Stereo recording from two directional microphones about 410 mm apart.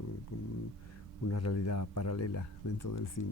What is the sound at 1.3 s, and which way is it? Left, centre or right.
Speech, left.